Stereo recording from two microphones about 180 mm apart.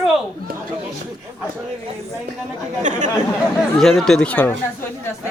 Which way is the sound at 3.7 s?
Centre (ahead or behind).